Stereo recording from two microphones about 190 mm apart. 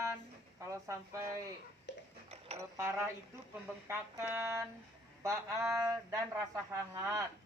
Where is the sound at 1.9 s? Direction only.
70° left (ahead or behind).